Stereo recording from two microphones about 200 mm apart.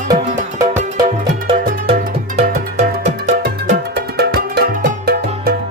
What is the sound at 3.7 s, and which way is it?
Music, 50° right (ahead or behind).